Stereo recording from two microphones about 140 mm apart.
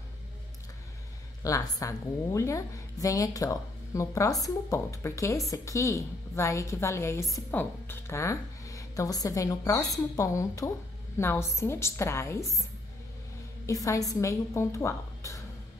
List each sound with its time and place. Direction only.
1.4 s a woman's voice: 25° left (ahead or behind)
13.7 s a woman's voice: 25° left (ahead or behind)